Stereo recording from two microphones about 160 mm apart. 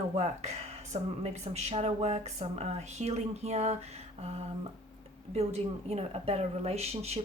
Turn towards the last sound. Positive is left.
turn(degrees=-40)  # may be behind; listen again after turning